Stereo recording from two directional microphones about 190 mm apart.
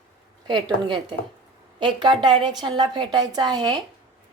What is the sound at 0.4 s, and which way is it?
A woman's voice, 25° right (ahead or behind).